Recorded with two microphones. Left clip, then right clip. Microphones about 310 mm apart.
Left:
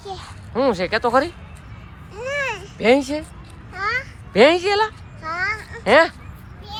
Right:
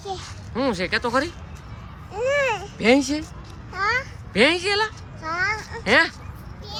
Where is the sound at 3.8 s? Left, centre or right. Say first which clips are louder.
Right 1 dB; centre.